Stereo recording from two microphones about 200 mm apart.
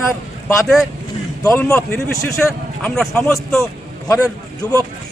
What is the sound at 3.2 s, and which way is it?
Speech, 15° left (ahead or behind).